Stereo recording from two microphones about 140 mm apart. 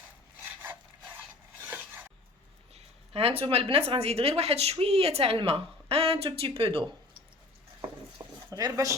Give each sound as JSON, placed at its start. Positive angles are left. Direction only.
{"t": 0.6, "sound": "wood", "side_deg": -15}
{"t": 1.6, "sound": "a sound", "side_deg": -10}
{"t": 2.7, "sound": "a woman's voice", "side_deg": -45}
{"t": 8.4, "sound": "speech", "side_deg": -25}